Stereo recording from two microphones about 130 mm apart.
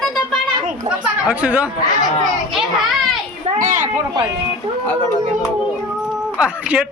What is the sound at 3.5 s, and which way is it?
Speech, 80° right.